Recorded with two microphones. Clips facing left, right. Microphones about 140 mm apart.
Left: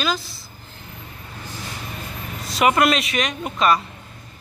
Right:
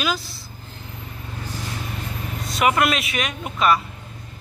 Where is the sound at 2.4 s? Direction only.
Centre (ahead or behind).